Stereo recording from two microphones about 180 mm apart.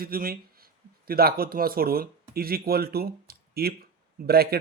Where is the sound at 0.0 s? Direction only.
55° right (ahead or behind).